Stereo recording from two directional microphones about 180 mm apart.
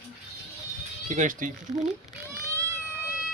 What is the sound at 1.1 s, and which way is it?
Speech, 45° right (ahead or behind).